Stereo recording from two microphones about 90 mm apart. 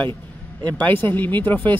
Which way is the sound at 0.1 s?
55° right (ahead or behind).